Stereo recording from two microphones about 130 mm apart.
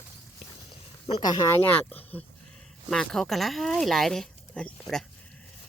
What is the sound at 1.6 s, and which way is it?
Speech, 10° left (ahead or behind).